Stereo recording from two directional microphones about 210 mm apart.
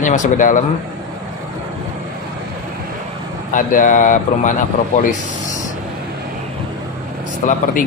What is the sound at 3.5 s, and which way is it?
Speech, 40° left (ahead or behind).